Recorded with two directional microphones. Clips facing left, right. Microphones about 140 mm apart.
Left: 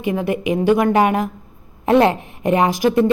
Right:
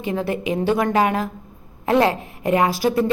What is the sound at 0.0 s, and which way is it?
A woman's voice, 15° left (ahead or behind).